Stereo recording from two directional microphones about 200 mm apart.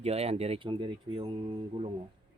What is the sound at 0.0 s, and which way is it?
Speech, 30° right (ahead or behind).